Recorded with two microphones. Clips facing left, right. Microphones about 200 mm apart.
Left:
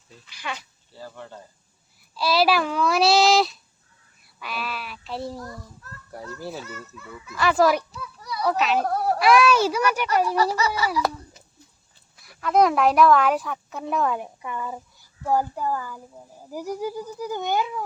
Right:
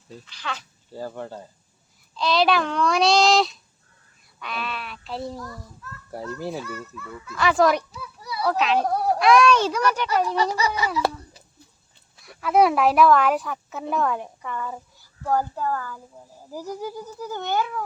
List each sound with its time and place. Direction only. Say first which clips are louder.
0.3 s speech: even; 10° left (ahead or behind)
0.9 s speech: right 7 dB; 45° right (ahead or behind)
2.1 s speech: even; 5° left (ahead or behind)
6.1 s a child's voice: right 4 dB; 25° right (ahead or behind)
7.3 s speech: even; centre (ahead or behind)
10.8 s baby laughter: even; 20° right (ahead or behind)
12.2 s speech: right 1 dB; centre (ahead or behind)